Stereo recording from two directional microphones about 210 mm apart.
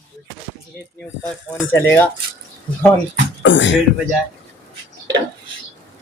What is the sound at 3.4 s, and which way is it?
Speech, 60° left (ahead or behind).